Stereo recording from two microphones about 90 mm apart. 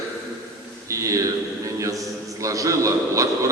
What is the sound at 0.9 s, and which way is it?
A man's voice, 35° right (ahead or behind).